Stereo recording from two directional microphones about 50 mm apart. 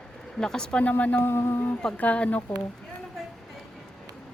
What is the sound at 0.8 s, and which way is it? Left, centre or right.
Speech, left.